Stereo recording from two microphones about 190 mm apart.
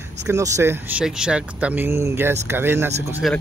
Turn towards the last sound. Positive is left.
turn(degrees=0)  # may be behind; listen again after turning